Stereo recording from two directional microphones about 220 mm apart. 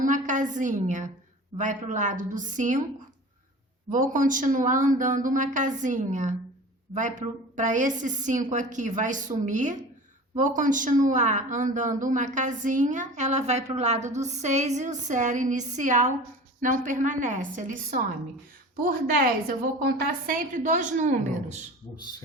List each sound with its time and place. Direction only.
0.0 s a woman's voice: 35° right (ahead or behind)
3.9 s speech: 35° right (ahead or behind)